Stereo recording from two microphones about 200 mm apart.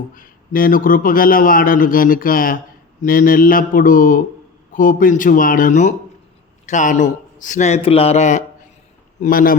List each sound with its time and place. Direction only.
0.1 s a man's voice: 45° left (ahead or behind)